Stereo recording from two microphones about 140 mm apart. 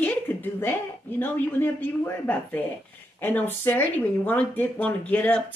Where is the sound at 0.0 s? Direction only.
15° left (ahead or behind).